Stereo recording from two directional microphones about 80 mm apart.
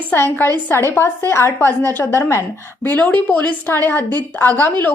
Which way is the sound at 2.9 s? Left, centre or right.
Centre.